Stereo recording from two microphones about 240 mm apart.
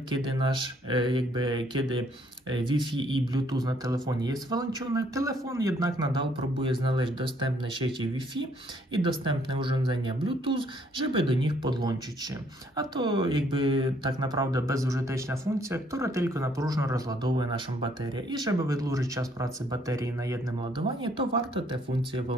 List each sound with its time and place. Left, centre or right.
0.1 s speech: centre
8.9 s speech: centre